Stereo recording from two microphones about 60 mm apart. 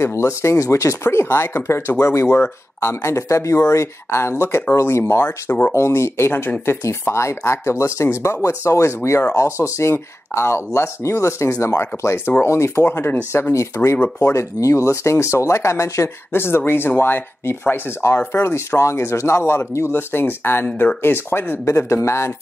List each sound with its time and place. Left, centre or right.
0.0 s speech: left
12.9 s speech: left
13.3 s speech: left
13.9 s speech: left
14.3 s speech: left
20.6 s speech: left
21.0 s speech: left